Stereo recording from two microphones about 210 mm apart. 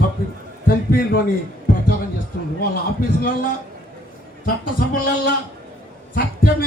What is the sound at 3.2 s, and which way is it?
A man's voice, 40° left (ahead or behind).